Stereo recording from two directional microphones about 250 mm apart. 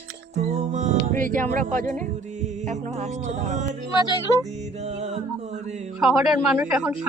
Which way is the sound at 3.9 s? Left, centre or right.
Centre.